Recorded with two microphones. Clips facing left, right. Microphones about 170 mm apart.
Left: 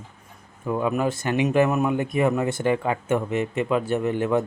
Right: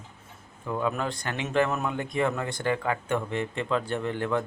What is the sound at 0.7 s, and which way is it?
A man's voice, 20° left (ahead or behind).